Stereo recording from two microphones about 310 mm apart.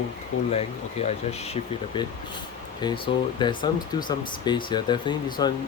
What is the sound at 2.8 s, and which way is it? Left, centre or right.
Speech, centre.